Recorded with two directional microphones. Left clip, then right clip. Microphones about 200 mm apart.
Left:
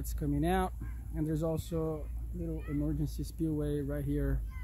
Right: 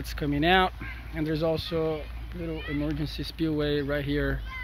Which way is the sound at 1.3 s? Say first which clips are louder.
Right 9 dB; 15° left (ahead or behind).